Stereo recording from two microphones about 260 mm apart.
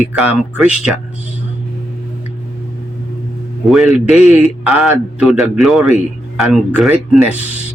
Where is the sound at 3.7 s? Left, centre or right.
Centre.